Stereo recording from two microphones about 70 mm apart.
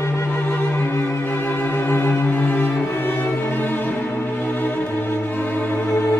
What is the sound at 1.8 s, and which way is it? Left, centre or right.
Music, left.